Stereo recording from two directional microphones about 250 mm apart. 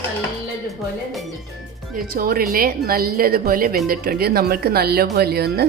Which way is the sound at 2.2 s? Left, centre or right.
Right.